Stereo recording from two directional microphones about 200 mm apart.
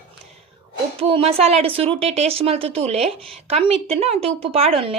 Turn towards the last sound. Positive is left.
turn(degrees=-30)  # may be behind; listen again after turning